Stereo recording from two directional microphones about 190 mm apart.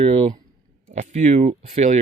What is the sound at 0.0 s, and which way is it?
Speech, 30° right (ahead or behind).